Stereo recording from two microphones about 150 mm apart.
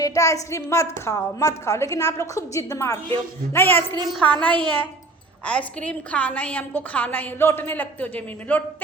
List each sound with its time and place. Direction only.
0.0 s a woman's voice: 20° left (ahead or behind)